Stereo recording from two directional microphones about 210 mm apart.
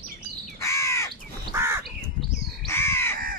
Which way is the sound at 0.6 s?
15° left (ahead or behind).